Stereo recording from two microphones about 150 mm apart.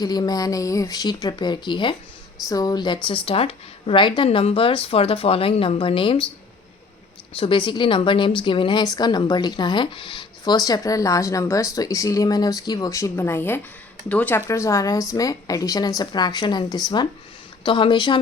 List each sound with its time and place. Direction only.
0.0 s a woman's voice: 25° left (ahead or behind)
7.3 s a woman's voice: 35° left (ahead or behind)